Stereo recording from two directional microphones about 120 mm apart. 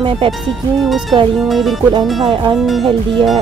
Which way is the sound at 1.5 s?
Centre (ahead or behind).